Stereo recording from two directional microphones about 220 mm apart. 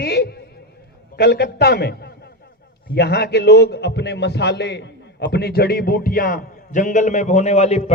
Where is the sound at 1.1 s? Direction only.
45° left (ahead or behind).